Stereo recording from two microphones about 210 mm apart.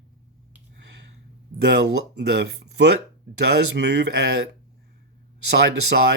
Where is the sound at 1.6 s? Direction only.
50° right (ahead or behind).